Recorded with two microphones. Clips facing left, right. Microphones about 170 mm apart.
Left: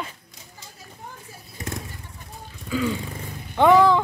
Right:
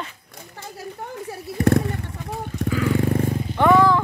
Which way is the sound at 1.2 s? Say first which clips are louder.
Right 17 dB; 65° right (ahead or behind).